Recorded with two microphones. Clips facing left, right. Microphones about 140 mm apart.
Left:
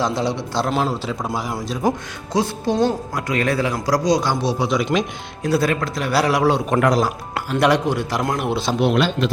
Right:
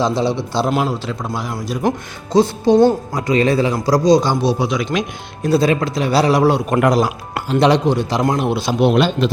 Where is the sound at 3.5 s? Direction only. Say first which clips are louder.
Right 4 dB; 15° right (ahead or behind).